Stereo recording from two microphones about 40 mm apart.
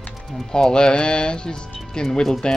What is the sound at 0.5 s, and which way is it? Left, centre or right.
Speech, centre.